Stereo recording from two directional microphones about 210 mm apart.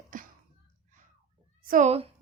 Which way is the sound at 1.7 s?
35° right (ahead or behind).